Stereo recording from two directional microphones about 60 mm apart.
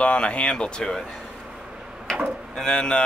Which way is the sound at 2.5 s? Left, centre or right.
Centre.